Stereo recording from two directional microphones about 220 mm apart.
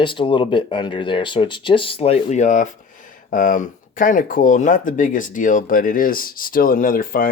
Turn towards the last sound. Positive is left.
turn(degrees=40)  # may be behind; listen again after turning